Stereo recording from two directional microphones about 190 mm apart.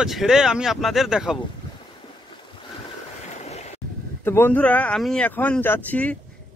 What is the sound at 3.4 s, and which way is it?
Waves, 35° left (ahead or behind).